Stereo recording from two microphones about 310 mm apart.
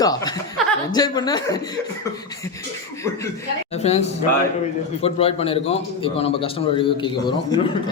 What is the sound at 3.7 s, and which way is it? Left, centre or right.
A man's voice, left.